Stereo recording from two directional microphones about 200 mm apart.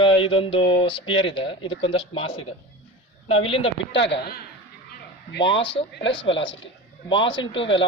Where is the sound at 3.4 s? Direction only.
25° left (ahead or behind).